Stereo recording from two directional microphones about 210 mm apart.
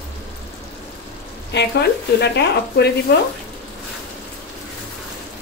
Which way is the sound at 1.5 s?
55° left (ahead or behind).